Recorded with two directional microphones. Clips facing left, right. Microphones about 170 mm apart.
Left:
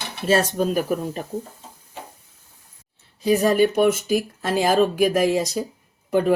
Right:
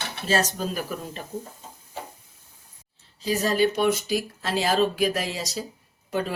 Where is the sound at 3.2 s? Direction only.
55° left (ahead or behind).